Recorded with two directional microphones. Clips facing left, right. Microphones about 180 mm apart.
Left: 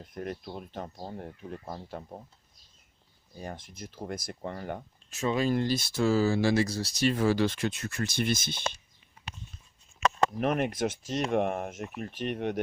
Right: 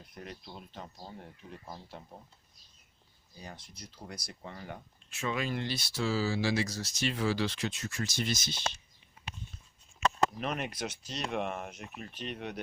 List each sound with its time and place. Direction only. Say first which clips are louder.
0.0 s speech: left 9 dB; 50° left (ahead or behind)
3.3 s speech: left 8 dB; 50° left (ahead or behind)
6.7 s speech: left 7 dB; 30° left (ahead or behind); by 8.8 s 55° left (ahead or behind)
10.4 s speech: left 8 dB; 55° left (ahead or behind)